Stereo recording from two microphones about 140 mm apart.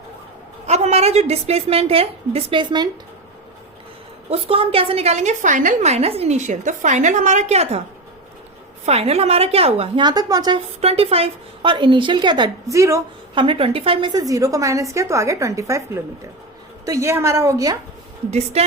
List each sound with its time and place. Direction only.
0.7 s a woman's voice: 50° right (ahead or behind); by 2.9 s 30° right (ahead or behind)
4.3 s a woman's voice: 45° right (ahead or behind)
8.9 s a woman's voice: 45° right (ahead or behind); by 10.6 s 30° right (ahead or behind)
10.8 s a woman's voice: 45° right (ahead or behind)
12.7 s a woman's voice: 20° right (ahead or behind)
13.3 s a woman's voice: 35° right (ahead or behind); by 15.8 s 20° right (ahead or behind)
16.8 s a woman's voice: 20° right (ahead or behind)
18.3 s a woman's voice: 50° right (ahead or behind)